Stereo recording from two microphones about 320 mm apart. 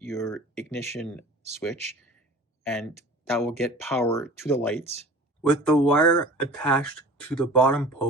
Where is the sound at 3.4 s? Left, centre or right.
Centre.